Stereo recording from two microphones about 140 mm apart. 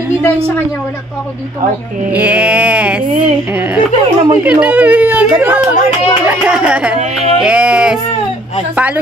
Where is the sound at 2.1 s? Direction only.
10° right (ahead or behind).